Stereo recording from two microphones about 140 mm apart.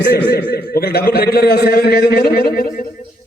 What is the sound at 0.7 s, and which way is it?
A man's voice, 90° left.